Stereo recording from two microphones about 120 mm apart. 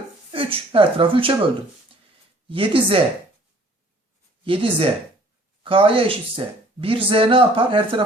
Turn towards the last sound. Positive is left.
turn(degrees=-45)  # may be behind; listen again after turning